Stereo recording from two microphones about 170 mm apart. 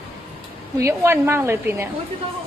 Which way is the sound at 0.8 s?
15° right (ahead or behind).